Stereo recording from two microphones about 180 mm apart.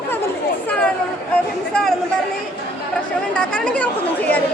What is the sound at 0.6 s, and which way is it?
Speech, 5° left (ahead or behind).